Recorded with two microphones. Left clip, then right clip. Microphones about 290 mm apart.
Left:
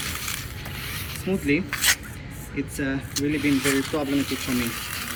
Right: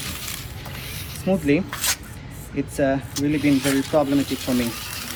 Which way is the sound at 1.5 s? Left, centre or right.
Centre.